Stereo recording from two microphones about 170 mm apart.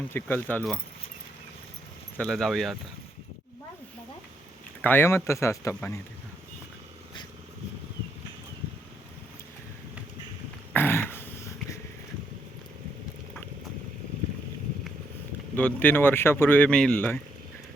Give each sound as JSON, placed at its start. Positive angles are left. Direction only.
{"t": 0.1, "sound": "speech", "side_deg": 10}
{"t": 2.1, "sound": "speech", "side_deg": 5}
{"t": 4.8, "sound": "speech", "side_deg": 10}
{"t": 10.7, "sound": "throat clearing", "side_deg": 10}
{"t": 15.5, "sound": "speech", "side_deg": 10}